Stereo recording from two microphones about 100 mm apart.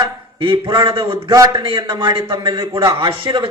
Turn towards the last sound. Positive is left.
turn(degrees=-55)  # may be behind; listen again after turning